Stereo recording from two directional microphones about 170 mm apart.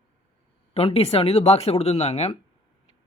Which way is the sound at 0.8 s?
35° left (ahead or behind).